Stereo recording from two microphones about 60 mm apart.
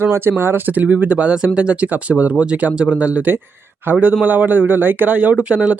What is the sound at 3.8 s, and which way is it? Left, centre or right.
Speech, right.